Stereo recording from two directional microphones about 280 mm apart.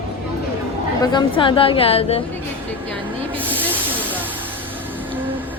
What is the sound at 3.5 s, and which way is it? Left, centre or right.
Snake, centre.